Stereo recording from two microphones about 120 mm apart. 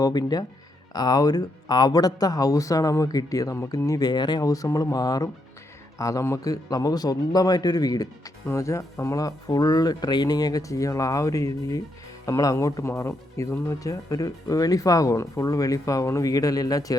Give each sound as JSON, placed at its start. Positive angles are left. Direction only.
{"t": 0.0, "sound": "speech", "side_deg": 35}